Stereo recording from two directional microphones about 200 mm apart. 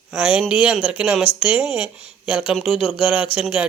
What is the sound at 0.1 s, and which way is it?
Speech, 5° right (ahead or behind).